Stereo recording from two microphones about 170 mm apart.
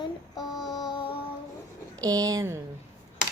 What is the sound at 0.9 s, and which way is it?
Child singing, 30° left (ahead or behind).